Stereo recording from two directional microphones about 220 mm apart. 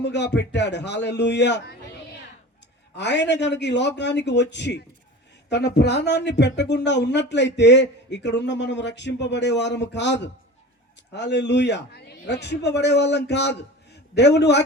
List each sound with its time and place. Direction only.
0.0 s speech: 50° left (ahead or behind)
3.0 s speech: 50° left (ahead or behind)